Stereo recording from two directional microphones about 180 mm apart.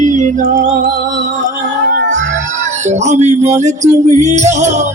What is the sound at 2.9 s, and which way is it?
Music, 40° right (ahead or behind).